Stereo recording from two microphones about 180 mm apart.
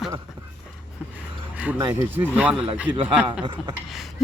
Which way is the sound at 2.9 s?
30° right (ahead or behind).